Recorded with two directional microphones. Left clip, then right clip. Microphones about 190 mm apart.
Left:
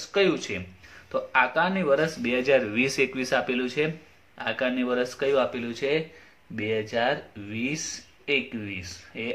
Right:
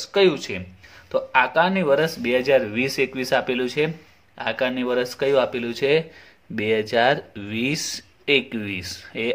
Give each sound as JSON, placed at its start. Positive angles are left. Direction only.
{"t": 0.0, "sound": "speech", "side_deg": -40}